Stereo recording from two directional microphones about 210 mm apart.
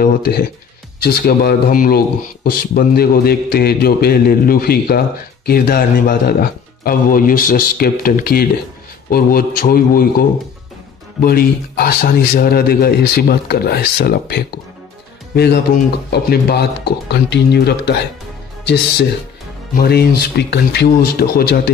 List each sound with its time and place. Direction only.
0.0 s a man's voice: 45° left (ahead or behind)
19.7 s a man's voice: 50° left (ahead or behind)